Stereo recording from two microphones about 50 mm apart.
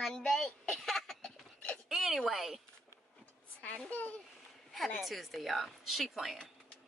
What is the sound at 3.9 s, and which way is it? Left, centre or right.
Speech, left.